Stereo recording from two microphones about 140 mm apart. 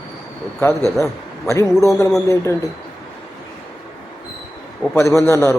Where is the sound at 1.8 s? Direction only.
20° left (ahead or behind).